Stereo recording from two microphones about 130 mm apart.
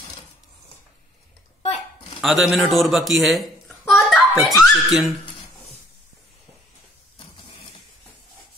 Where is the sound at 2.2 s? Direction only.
Centre (ahead or behind).